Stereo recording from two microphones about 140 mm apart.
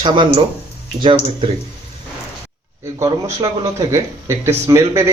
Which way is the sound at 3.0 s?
25° right (ahead or behind).